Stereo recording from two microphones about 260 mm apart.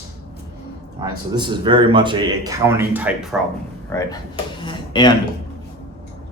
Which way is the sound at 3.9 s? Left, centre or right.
Centre.